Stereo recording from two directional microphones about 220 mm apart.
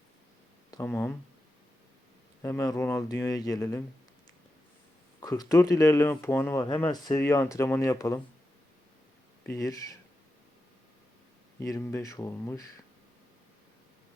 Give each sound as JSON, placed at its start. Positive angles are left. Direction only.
{"t": 0.7, "sound": "speech", "side_deg": 10}
{"t": 2.4, "sound": "speech", "side_deg": 15}
{"t": 5.2, "sound": "speech", "side_deg": 15}
{"t": 9.5, "sound": "speech", "side_deg": 15}
{"t": 11.6, "sound": "speech", "side_deg": 15}